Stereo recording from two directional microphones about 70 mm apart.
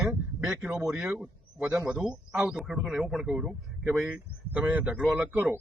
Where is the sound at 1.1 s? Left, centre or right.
Right.